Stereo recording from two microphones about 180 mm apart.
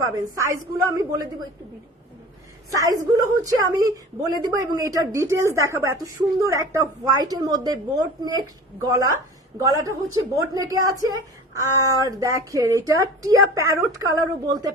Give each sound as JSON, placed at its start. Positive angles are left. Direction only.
{"t": 0.0, "sound": "a woman's voice", "side_deg": -15}
{"t": 2.6, "sound": "a woman's voice", "side_deg": -20}